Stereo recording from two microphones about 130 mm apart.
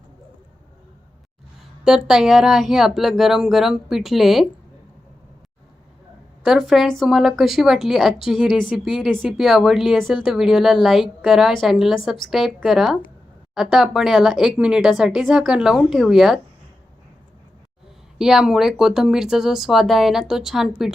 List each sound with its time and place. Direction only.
1.8 s speech: 5° right (ahead or behind)
6.4 s speech: centre (ahead or behind)
18.2 s speech: 5° right (ahead or behind)